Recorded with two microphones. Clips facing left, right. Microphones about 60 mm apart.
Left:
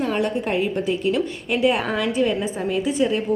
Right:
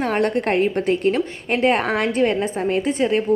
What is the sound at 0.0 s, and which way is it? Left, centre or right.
A woman's voice, right.